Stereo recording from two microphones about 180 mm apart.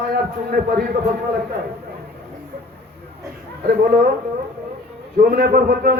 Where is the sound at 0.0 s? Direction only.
60° right (ahead or behind).